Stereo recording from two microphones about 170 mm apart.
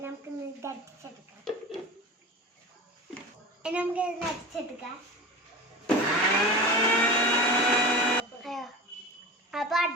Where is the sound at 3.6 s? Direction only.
5° right (ahead or behind).